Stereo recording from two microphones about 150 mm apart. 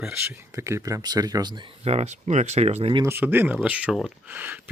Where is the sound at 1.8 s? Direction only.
45° right (ahead or behind).